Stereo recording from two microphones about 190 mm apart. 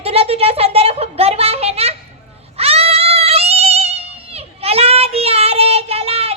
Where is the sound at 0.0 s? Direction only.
30° right (ahead or behind).